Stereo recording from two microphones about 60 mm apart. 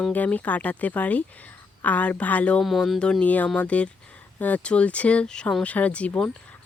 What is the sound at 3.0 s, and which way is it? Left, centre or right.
Speech, centre.